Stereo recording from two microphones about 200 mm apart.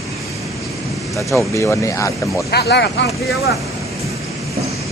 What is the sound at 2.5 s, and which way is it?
Speech, 55° left (ahead or behind).